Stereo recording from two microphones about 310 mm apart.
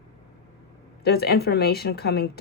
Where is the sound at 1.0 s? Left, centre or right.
Left.